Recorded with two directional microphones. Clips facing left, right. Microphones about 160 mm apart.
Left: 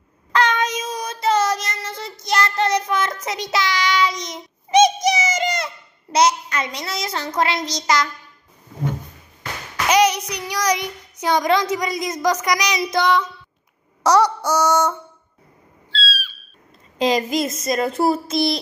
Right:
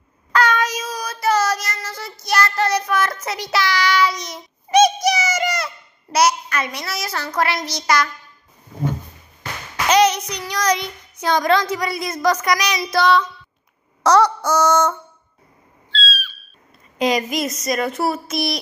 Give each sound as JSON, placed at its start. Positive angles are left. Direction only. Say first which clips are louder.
{"t": 0.3, "sound": "child singing", "louder": "right 1 dB", "side_deg": 20}
{"t": 6.1, "sound": "a child's voice", "louder": "even", "side_deg": 20}
{"t": 9.8, "sound": "child singing", "louder": "right 1 dB", "side_deg": 10}
{"t": 15.9, "sound": "owl", "louder": "right 1 dB", "side_deg": 10}
{"t": 17.0, "sound": "a child's voice", "louder": "left 1 dB", "side_deg": 25}